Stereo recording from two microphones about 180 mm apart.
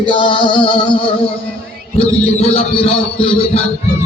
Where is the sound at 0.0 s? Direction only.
25° left (ahead or behind).